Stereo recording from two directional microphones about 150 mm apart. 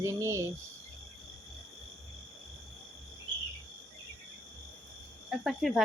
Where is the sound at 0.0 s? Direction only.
20° right (ahead or behind).